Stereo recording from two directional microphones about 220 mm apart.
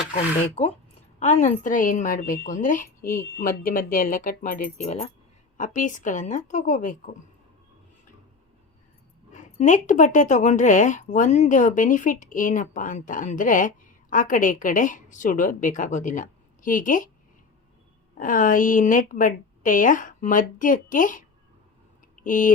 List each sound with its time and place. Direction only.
0.1 s speech: 30° left (ahead or behind)
9.3 s speech: 35° left (ahead or behind)
18.2 s speech: 40° left (ahead or behind)
22.1 s a sound: 35° left (ahead or behind)